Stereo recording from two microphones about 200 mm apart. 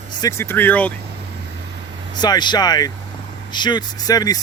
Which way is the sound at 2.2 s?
20° left (ahead or behind).